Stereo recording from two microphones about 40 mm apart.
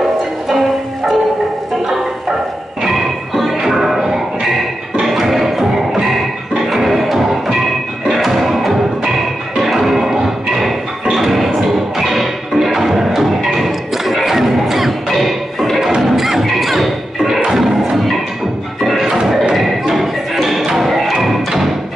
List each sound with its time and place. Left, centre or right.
0.5 s music: centre
2.8 s music: centre
17.5 s a sound: centre
17.9 s music: centre
19.1 s a sound: centre
19.5 s music: centre